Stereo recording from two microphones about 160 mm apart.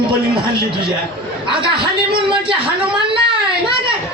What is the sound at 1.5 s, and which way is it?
Speech, 30° right (ahead or behind).